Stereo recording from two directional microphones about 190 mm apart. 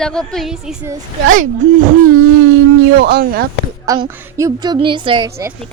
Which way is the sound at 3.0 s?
60° right (ahead or behind).